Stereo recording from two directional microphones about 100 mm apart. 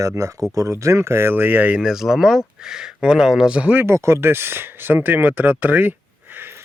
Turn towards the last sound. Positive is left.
turn(degrees=-20)  # may be behind; listen again after turning